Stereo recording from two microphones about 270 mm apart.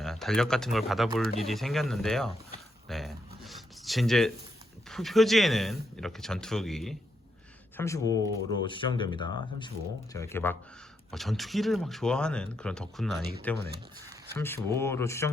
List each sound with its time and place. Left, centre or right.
0.0 s speech: centre
2.9 s a sound: centre
4.9 s speech: centre
7.8 s speech: centre